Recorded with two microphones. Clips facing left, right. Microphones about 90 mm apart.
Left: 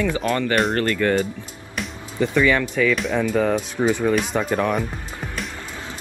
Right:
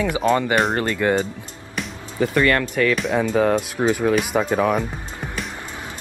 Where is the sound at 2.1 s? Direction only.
Centre (ahead or behind).